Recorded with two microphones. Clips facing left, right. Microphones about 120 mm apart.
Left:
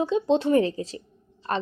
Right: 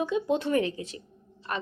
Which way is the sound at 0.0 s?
30° left (ahead or behind).